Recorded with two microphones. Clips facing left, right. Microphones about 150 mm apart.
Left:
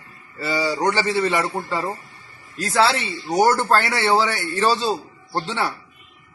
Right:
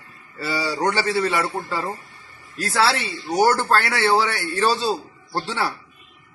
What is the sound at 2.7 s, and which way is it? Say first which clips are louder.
Speech: left 2 dB; centre (ahead or behind).